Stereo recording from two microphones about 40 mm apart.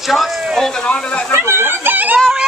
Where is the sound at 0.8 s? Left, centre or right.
Left.